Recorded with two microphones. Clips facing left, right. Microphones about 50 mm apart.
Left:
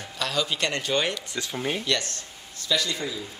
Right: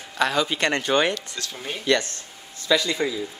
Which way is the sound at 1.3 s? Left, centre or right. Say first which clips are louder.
Left 4 dB; centre.